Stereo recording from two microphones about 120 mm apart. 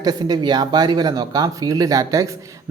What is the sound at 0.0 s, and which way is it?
Speech, 35° right (ahead or behind).